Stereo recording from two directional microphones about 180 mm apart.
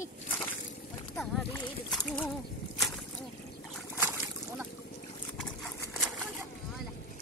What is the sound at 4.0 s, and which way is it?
Boat, 10° right (ahead or behind).